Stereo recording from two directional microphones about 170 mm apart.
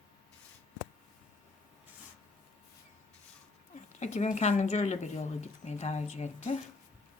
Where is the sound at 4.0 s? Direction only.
45° left (ahead or behind).